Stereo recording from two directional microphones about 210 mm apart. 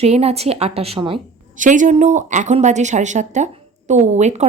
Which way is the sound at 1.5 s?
35° right (ahead or behind).